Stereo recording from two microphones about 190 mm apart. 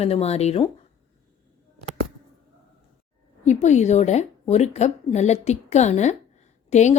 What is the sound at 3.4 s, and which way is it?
A woman's voice, 40° left (ahead or behind).